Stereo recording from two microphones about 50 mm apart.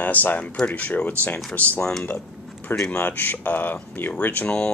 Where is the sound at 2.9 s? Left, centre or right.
Left.